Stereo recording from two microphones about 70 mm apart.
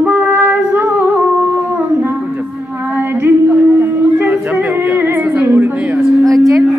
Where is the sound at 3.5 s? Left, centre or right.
Centre.